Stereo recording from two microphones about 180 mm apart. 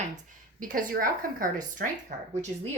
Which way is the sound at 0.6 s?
50° right (ahead or behind).